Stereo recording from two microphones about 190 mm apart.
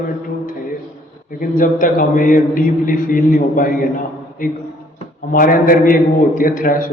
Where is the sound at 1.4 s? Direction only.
45° left (ahead or behind).